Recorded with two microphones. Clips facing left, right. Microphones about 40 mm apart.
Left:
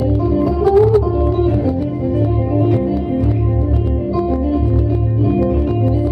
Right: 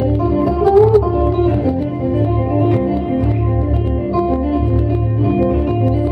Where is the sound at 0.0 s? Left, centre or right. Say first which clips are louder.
Even; right.